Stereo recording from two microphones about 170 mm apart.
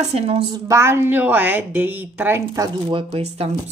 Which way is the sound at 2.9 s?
30° right (ahead or behind).